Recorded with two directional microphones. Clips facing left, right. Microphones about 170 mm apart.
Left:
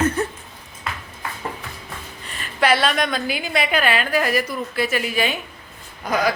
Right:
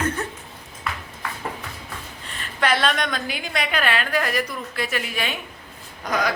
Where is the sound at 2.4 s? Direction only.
5° left (ahead or behind).